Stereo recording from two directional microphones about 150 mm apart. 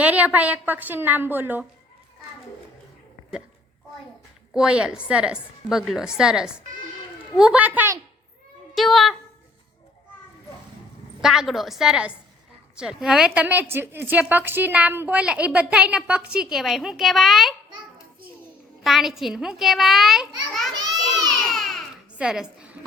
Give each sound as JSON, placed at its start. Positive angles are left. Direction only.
{"t": 0.0, "sound": "a woman's voice", "side_deg": -10}
{"t": 4.5, "sound": "a woman's voice", "side_deg": -5}
{"t": 8.7, "sound": "a woman's voice", "side_deg": 0}
{"t": 11.2, "sound": "a woman's voice", "side_deg": -5}
{"t": 18.8, "sound": "a woman's voice", "side_deg": 0}
{"t": 20.7, "sound": "a sound", "side_deg": -25}
{"t": 21.5, "sound": "babbling", "side_deg": 0}